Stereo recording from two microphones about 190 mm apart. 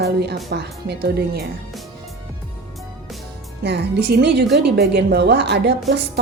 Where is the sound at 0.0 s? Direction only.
60° right (ahead or behind).